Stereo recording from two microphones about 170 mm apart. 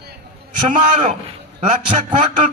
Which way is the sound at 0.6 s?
45° right (ahead or behind).